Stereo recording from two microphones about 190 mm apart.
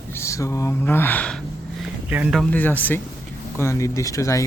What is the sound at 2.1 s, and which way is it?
Speech, 5° right (ahead or behind).